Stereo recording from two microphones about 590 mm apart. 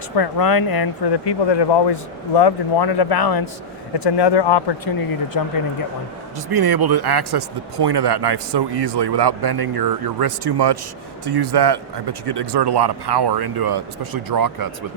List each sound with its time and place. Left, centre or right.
0.2 s speech: left
6.5 s speech: right